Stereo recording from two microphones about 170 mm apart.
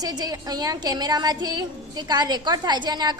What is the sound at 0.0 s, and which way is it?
A woman's voice, 25° right (ahead or behind).